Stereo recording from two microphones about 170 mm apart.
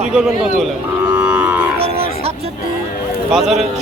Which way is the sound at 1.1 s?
10° right (ahead or behind).